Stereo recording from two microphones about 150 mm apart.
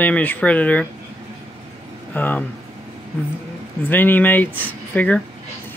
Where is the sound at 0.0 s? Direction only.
10° left (ahead or behind).